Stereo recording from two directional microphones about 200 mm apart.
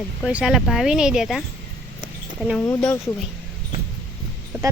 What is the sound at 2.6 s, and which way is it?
Speech, 10° left (ahead or behind).